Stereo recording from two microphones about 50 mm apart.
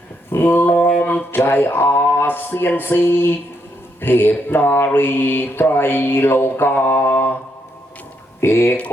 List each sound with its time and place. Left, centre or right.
0.3 s mantra: left
1.5 s music: left
2.1 s mantra: left
8.4 s speech: left